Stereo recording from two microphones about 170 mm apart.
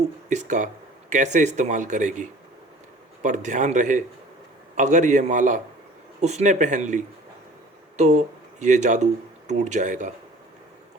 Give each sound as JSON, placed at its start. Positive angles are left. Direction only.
{"t": 0.3, "sound": "speech", "side_deg": -45}
{"t": 3.2, "sound": "speech", "side_deg": -45}